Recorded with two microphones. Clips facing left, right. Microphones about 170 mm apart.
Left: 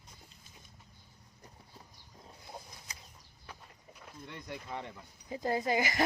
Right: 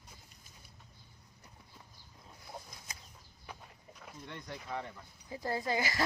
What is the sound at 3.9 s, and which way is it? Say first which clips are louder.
Vehicle: even; 5° left (ahead or behind).